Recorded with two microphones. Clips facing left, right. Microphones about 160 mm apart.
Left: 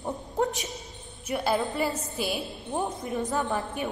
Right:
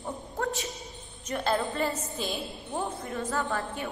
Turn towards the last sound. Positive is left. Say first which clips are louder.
# left 2 dB
turn(degrees=15)  # may be behind; listen again after turning